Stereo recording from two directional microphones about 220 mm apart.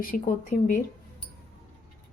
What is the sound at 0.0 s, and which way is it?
Speech, 40° left (ahead or behind).